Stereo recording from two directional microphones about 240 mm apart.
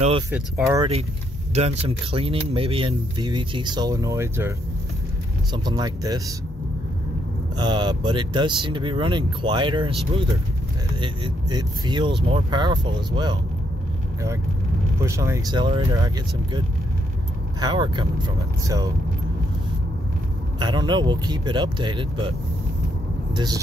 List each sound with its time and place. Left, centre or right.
0.3 s speech: centre
1.5 s speech: right
7.5 s speech: centre
11.0 s speech: centre
15.0 s speech: centre
17.6 s speech: centre
20.5 s speech: centre
23.3 s speech: centre